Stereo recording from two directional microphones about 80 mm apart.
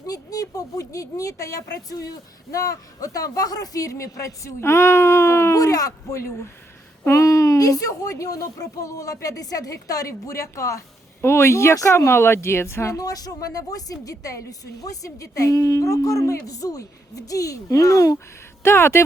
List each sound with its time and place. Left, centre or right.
0.1 s a woman's voice: left
5.5 s a woman's voice: left
18.6 s speech: left